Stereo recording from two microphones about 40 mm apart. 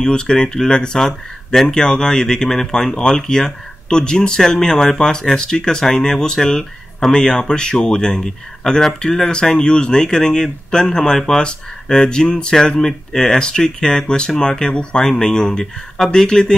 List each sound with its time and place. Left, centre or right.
0.0 s speech: left